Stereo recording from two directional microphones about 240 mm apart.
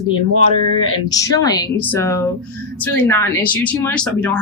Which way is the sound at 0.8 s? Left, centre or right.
Centre.